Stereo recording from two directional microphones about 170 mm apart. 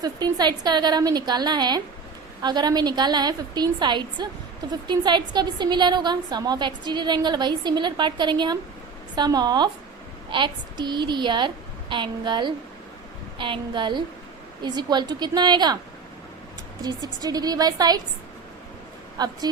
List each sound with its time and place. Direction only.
0.0 s a woman's voice: 25° right (ahead or behind)
16.8 s a woman's voice: 20° right (ahead or behind)
19.1 s a woman's voice: 25° right (ahead or behind)